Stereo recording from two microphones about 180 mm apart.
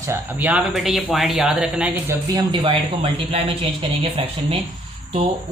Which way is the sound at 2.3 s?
30° right (ahead or behind).